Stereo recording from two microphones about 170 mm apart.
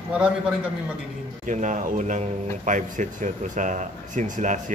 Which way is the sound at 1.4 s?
45° right (ahead or behind).